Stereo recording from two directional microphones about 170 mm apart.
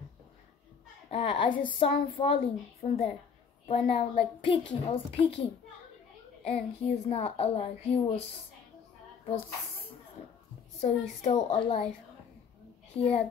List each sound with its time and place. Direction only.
1.1 s a woman's voice: 30° left (ahead or behind)
10.8 s a woman's voice: 40° left (ahead or behind)
12.9 s a child's voice: 35° left (ahead or behind)